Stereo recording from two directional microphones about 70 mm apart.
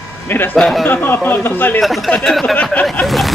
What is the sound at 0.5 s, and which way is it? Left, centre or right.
Speech, centre.